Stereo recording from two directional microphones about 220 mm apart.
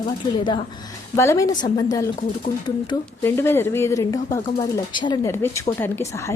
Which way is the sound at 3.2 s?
10° left (ahead or behind).